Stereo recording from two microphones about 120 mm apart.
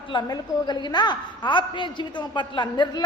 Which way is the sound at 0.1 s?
40° left (ahead or behind).